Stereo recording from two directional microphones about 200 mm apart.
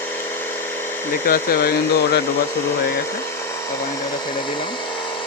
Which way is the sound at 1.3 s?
50° left (ahead or behind).